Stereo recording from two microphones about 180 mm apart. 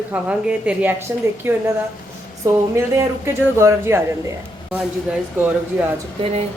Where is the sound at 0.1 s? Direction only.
5° right (ahead or behind).